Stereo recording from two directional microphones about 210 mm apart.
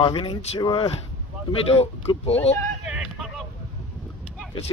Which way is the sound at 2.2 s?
30° left (ahead or behind).